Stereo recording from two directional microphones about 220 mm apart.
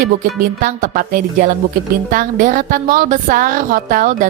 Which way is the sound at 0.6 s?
40° right (ahead or behind).